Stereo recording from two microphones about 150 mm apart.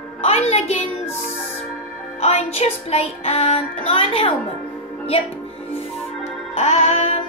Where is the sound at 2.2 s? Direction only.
45° left (ahead or behind).